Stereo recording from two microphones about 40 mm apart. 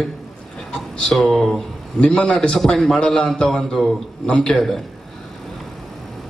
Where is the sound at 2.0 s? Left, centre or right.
Left.